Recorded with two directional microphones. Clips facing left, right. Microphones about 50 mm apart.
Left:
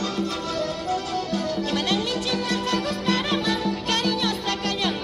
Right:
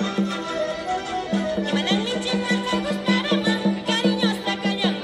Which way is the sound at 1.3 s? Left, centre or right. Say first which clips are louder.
Right 4 dB; right.